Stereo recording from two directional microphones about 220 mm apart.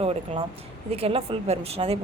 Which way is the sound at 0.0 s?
25° right (ahead or behind).